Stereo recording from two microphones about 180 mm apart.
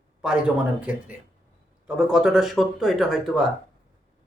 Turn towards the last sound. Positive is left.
turn(degrees=0)  # may be behind; listen again after turning